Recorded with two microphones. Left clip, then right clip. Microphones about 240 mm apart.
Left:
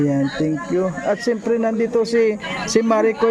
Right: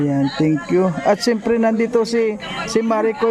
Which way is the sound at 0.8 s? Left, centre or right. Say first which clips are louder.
Right 4 dB; right.